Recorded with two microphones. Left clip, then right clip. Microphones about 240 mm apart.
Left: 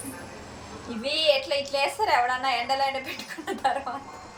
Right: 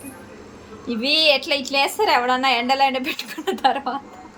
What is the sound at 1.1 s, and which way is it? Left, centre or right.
A woman's voice, right.